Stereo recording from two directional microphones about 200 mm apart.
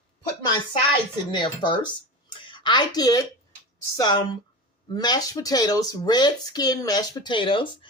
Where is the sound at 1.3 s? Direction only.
20° left (ahead or behind).